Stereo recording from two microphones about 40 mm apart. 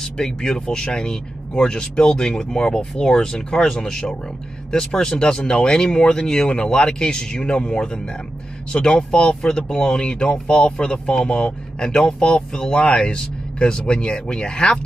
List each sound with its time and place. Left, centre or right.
0.0 s speech: centre
11.1 s speech: centre